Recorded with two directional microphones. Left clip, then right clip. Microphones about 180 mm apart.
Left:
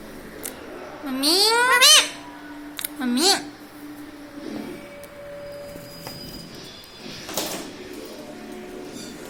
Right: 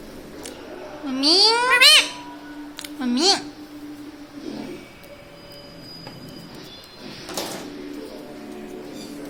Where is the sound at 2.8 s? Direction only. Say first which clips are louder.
Right 1 dB; 15° right (ahead or behind).